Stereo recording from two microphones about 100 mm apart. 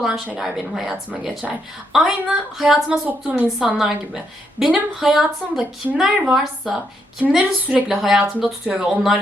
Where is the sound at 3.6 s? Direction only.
5° right (ahead or behind).